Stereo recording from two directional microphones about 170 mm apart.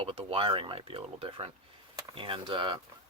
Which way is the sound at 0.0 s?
35° right (ahead or behind).